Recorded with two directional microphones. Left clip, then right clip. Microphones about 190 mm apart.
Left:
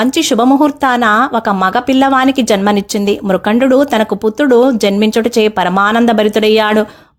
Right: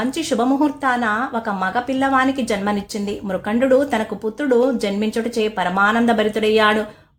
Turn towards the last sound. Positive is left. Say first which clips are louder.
# left 6 dB
turn(degrees=50)  # may be behind; listen again after turning